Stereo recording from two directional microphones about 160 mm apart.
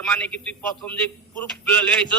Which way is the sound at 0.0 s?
10° left (ahead or behind).